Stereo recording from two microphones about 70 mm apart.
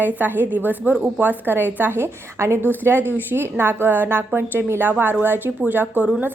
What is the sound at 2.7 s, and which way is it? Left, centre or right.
A woman's voice, right.